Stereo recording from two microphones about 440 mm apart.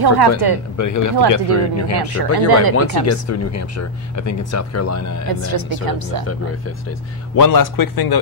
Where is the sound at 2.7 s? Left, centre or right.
Left.